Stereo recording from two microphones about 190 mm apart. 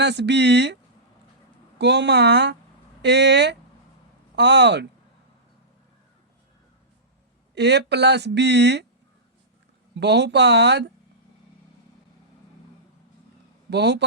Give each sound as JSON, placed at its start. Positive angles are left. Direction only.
{"t": 0.0, "sound": "speech", "side_deg": -65}
{"t": 1.8, "sound": "speech", "side_deg": -65}
{"t": 7.5, "sound": "speech", "side_deg": -65}
{"t": 9.9, "sound": "speech", "side_deg": -65}
{"t": 13.7, "sound": "a man's voice", "side_deg": -65}